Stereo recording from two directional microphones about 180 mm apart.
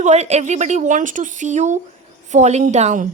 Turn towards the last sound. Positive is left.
turn(degrees=-40)  # may be behind; listen again after turning